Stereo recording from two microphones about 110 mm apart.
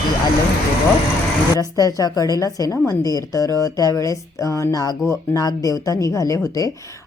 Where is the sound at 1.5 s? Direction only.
30° left (ahead or behind).